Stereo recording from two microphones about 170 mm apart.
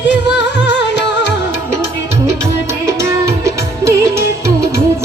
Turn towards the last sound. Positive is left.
turn(degrees=-15)  # may be behind; listen again after turning